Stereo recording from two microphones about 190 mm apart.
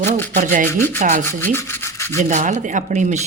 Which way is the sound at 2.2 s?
40° right (ahead or behind).